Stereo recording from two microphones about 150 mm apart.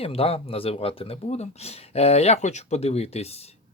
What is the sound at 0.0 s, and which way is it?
Speech, 40° left (ahead or behind).